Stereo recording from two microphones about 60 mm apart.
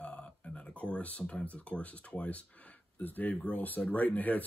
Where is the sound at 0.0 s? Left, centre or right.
Left.